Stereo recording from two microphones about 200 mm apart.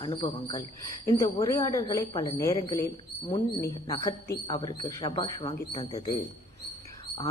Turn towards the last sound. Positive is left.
turn(degrees=20)  # may be behind; listen again after turning